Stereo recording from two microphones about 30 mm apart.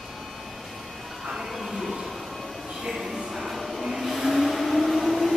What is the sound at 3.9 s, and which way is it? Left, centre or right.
Vehicle, centre.